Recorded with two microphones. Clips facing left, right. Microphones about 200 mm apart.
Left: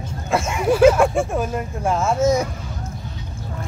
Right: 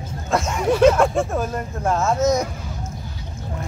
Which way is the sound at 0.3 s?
5° left (ahead or behind).